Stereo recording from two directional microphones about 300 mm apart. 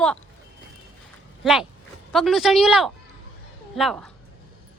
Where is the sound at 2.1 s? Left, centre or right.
Centre.